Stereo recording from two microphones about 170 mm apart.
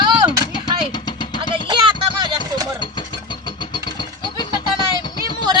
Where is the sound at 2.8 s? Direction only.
25° left (ahead or behind).